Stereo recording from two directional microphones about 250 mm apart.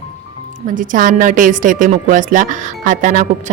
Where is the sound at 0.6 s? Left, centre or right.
Right.